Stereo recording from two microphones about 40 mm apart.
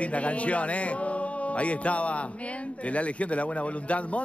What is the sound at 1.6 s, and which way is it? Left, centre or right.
Speech, left.